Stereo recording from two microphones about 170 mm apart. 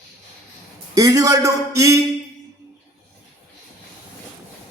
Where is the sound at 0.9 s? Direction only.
20° right (ahead or behind).